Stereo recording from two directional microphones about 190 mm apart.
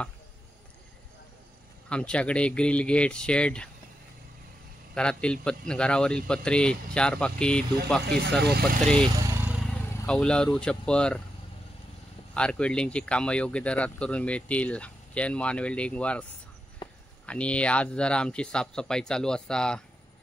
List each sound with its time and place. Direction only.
1.9 s a man's voice: 5° left (ahead or behind)
4.9 s a man's voice: 5° left (ahead or behind)
12.4 s speech: 5° left (ahead or behind)
16.8 s a sound: 25° left (ahead or behind)
17.3 s a man's voice: 5° left (ahead or behind)